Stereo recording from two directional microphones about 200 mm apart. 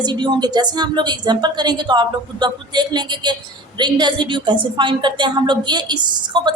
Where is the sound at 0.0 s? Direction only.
20° right (ahead or behind).